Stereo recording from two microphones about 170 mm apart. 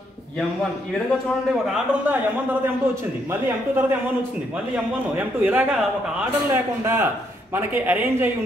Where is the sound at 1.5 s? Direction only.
5° right (ahead or behind).